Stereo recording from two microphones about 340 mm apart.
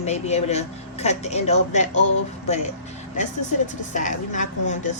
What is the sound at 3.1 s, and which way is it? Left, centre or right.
A woman's voice, left.